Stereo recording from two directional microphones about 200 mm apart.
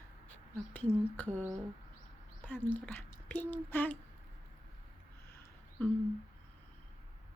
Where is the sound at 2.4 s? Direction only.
10° left (ahead or behind).